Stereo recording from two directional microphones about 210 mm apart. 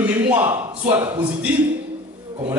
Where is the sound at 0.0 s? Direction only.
10° right (ahead or behind).